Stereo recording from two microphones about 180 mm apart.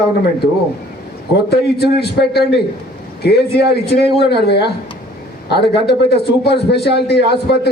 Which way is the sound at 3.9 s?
65° left (ahead or behind).